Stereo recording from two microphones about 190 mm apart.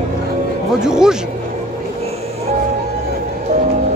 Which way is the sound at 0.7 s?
5° right (ahead or behind).